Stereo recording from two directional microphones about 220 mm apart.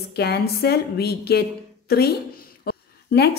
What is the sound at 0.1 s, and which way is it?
A woman's voice, 45° left (ahead or behind).